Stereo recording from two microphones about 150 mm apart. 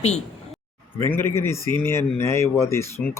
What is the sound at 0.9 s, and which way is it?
Speech, 15° left (ahead or behind).